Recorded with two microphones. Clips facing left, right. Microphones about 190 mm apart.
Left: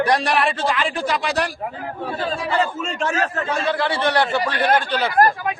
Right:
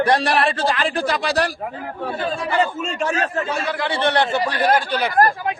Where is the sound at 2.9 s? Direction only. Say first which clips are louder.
Even; 15° right (ahead or behind).